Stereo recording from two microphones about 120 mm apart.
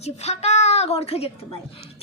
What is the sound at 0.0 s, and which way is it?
A woman's voice, 65° left (ahead or behind).